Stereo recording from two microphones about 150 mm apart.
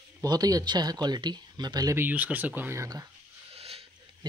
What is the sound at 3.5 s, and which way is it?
Wheeze, 40° right (ahead or behind).